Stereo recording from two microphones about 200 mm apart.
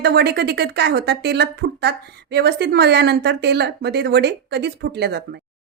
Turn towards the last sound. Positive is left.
turn(degrees=-55)  # may be behind; listen again after turning